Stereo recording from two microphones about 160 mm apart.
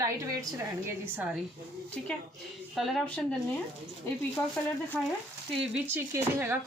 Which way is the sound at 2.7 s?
Centre (ahead or behind).